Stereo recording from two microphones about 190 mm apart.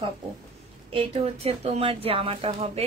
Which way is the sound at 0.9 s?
30° right (ahead or behind).